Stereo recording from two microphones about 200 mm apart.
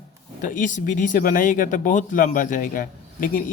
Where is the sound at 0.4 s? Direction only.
40° left (ahead or behind).